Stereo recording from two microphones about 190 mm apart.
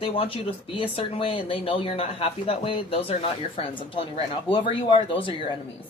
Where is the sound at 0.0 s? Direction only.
30° left (ahead or behind).